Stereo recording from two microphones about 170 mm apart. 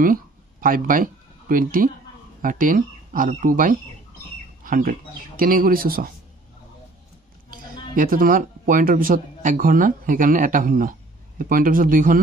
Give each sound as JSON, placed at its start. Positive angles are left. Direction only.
{"t": 0.0, "sound": "speech", "side_deg": -55}
{"t": 7.9, "sound": "speech", "side_deg": -55}